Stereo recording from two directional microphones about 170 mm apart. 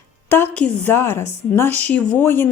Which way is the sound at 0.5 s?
10° left (ahead or behind).